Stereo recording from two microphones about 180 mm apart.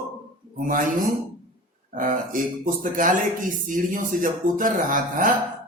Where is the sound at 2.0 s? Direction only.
50° right (ahead or behind).